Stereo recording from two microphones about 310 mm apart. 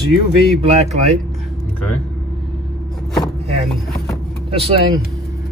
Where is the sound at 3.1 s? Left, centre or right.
Centre.